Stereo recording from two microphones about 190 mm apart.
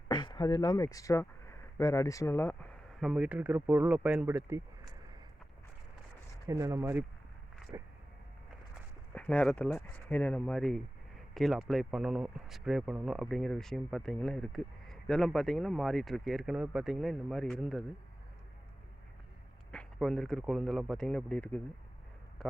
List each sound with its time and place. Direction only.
0.1 s speech: 25° left (ahead or behind)
3.0 s speech: 5° right (ahead or behind)
6.5 s speech: 15° right (ahead or behind)
7.7 s a sound: 15° right (ahead or behind)
9.1 s speech: 5° left (ahead or behind)
19.7 s speech: 5° left (ahead or behind)